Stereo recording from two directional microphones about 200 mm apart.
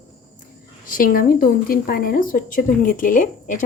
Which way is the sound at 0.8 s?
45° left (ahead or behind).